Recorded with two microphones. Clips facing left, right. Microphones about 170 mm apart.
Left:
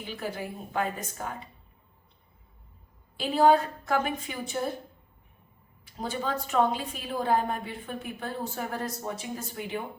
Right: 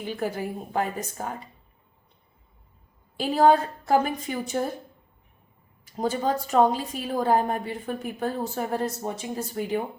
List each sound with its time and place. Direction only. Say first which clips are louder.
0.2 s a woman's voice: right 4 dB; 40° right (ahead or behind)
3.2 s a woman's voice: right 2 dB; 40° right (ahead or behind)
5.8 s a woman's voice: right 7 dB; 40° right (ahead or behind)